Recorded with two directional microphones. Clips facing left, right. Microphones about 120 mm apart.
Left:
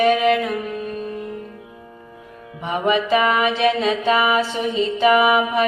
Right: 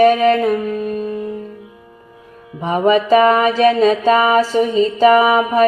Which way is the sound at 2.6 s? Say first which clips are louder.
Right 6 dB; 40° right (ahead or behind).